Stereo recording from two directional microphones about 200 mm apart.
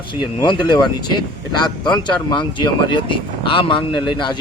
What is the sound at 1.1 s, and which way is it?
Speech, 20° left (ahead or behind).